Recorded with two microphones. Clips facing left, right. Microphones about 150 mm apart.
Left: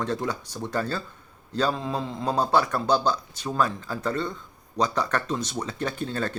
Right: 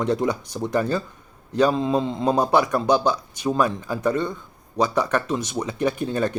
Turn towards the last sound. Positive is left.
turn(degrees=-15)  # may be behind; listen again after turning